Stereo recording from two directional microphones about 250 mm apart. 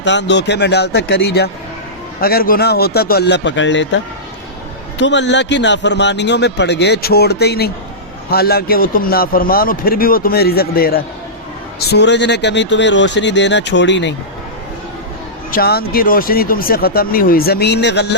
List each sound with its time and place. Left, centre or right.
0.0 s a man's voice: left
15.5 s speech: left